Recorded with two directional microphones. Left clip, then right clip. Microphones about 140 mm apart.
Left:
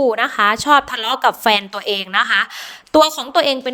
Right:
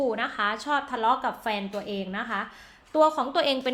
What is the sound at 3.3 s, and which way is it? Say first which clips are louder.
Speech: left 14 dB; 40° left (ahead or behind).